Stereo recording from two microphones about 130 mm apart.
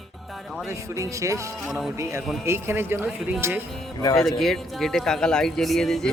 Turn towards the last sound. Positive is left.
turn(degrees=5)  # may be behind; listen again after turning